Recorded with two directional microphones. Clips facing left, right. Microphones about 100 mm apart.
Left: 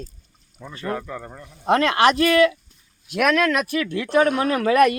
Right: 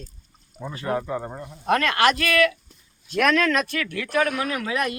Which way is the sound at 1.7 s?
20° left (ahead or behind).